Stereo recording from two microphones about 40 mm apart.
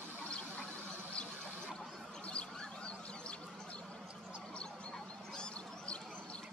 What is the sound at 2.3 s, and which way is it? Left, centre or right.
Duck, left.